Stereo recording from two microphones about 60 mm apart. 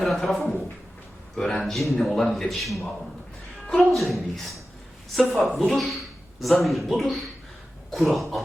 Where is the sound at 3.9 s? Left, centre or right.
Centre.